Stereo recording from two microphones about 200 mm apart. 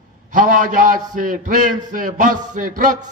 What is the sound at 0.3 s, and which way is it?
A man's voice, 40° right (ahead or behind).